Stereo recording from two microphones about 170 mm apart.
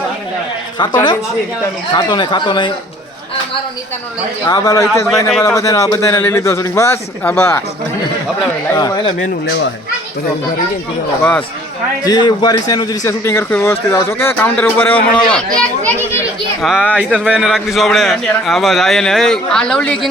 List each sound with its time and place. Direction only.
1.9 s speech: 25° left (ahead or behind)
4.4 s speech: 20° left (ahead or behind)
5.3 s a man's voice: 5° left (ahead or behind)
5.5 s a man's voice: 20° left (ahead or behind)
8.7 s speech: 25° left (ahead or behind)
11.2 s a man's voice: 10° left (ahead or behind)
12.0 s a man's voice: 25° left (ahead or behind); by 16.0 s 5° left (ahead or behind)
16.6 s a man's voice: 5° right (ahead or behind)